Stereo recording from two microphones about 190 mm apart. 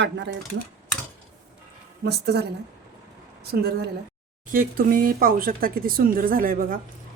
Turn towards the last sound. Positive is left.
turn(degrees=-50)  # may be behind; listen again after turning